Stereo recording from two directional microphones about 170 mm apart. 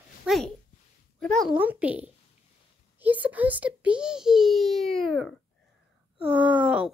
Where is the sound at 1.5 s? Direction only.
10° right (ahead or behind).